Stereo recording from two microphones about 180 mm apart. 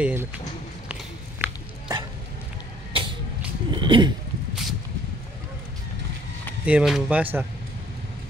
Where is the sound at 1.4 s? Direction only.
20° right (ahead or behind).